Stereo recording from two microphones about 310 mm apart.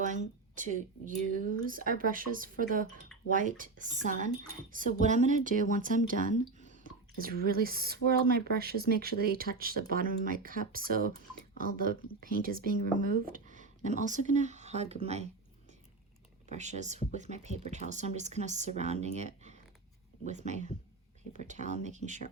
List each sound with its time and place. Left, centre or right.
0.0 s speech: right
6.6 s whispering: right
7.2 s speech: right
16.5 s speech: right